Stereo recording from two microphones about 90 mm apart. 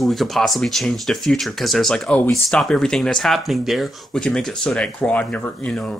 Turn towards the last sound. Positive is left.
turn(degrees=5)  # may be behind; listen again after turning